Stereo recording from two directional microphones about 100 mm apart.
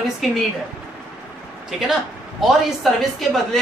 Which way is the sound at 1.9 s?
Centre (ahead or behind).